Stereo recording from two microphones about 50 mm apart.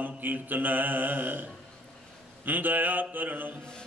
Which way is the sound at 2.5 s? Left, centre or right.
Right.